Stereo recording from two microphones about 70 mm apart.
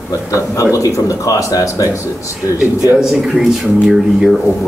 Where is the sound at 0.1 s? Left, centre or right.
Left.